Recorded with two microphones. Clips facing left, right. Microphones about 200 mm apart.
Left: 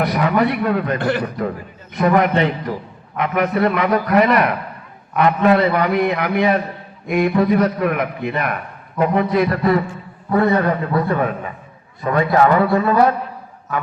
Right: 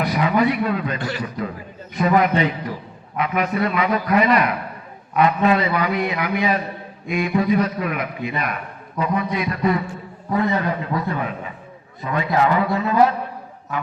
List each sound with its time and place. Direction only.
0.0 s a man's voice: 55° left (ahead or behind)